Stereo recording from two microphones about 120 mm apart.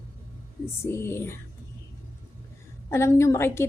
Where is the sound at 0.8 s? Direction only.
20° left (ahead or behind).